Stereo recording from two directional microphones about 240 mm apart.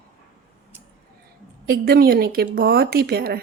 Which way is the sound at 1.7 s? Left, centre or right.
Right.